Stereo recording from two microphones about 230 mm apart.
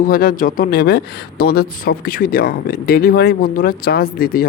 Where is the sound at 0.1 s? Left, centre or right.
Left.